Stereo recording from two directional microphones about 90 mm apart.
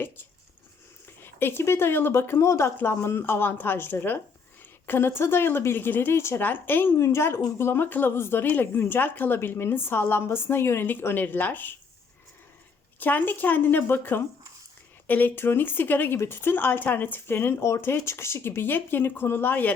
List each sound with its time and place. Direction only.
1.2 s speech: 25° left (ahead or behind)
13.0 s speech: 20° left (ahead or behind)